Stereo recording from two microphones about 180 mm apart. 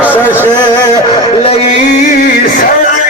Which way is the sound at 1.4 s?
35° left (ahead or behind).